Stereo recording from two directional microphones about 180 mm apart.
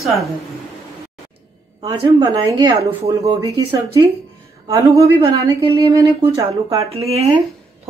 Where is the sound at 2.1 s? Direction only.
30° right (ahead or behind).